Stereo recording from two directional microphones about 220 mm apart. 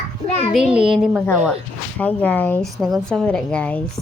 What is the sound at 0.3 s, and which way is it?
Speech, 30° left (ahead or behind).